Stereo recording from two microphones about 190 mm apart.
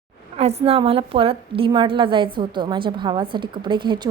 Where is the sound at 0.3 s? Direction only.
30° right (ahead or behind).